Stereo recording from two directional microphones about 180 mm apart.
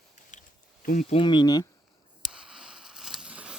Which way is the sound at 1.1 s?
25° left (ahead or behind).